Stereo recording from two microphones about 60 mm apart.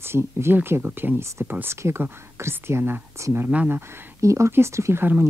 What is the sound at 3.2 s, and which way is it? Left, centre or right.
Speech, right.